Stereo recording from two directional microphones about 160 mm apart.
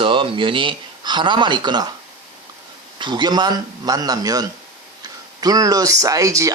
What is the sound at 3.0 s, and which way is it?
Speech, 30° right (ahead or behind).